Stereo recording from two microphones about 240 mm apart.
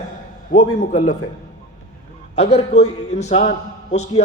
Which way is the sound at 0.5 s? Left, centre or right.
Left.